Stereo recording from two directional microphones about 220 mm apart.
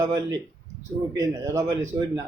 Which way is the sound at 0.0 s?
15° right (ahead or behind).